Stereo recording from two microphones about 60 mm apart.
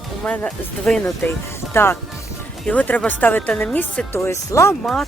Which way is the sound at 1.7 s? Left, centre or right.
Left.